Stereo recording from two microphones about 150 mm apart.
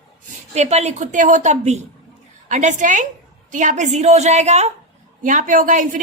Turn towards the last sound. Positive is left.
turn(degrees=-60)  # may be behind; listen again after turning